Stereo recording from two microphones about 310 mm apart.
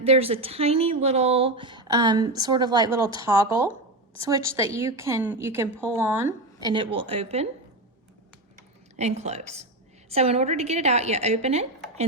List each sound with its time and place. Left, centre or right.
0.0 s speech: centre
9.0 s a woman's voice: right